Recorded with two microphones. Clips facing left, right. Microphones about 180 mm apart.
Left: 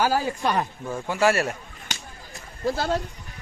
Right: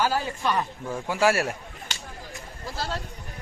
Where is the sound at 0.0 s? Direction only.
40° left (ahead or behind).